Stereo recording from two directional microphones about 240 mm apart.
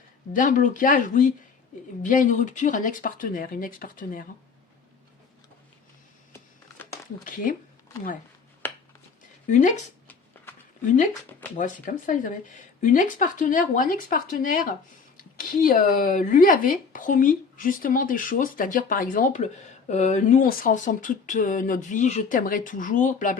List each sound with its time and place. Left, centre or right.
0.3 s speech: left
7.3 s speech: left
8.6 s a sound: centre
9.5 s speech: left
10.8 s speech: left